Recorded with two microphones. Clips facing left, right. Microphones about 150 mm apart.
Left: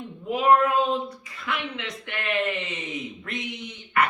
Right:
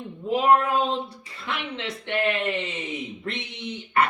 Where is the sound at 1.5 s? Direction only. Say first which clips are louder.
Even; 30° right (ahead or behind).